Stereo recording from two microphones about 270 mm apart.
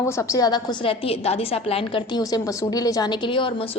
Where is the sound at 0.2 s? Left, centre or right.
Centre.